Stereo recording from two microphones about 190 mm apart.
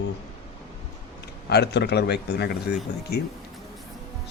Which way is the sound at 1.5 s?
60° left (ahead or behind).